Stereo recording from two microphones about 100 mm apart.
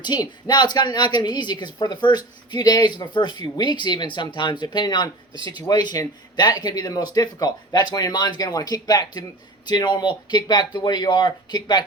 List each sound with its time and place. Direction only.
0.0 s a woman's voice: 45° left (ahead or behind)